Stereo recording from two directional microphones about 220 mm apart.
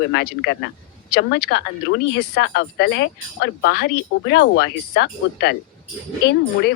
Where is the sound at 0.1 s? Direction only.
50° left (ahead or behind).